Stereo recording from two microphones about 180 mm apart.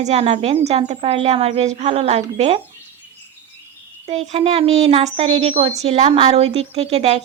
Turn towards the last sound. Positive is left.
turn(degrees=-35)  # may be behind; listen again after turning